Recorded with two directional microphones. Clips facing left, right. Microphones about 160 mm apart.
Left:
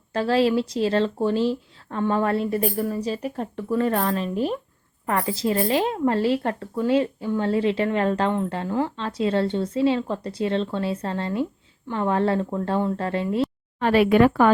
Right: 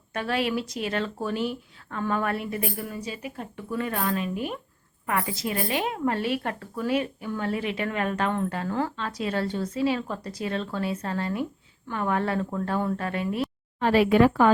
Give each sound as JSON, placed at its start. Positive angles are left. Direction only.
{"t": 0.1, "sound": "a woman's voice", "side_deg": 30}
{"t": 13.7, "sound": "speech", "side_deg": 65}